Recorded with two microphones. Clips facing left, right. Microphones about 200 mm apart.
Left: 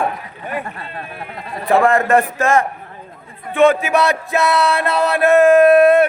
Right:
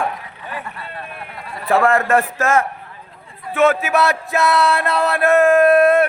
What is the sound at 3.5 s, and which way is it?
Male singing, 5° right (ahead or behind).